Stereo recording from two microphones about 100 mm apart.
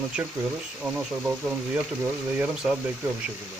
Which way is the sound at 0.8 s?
15° right (ahead or behind).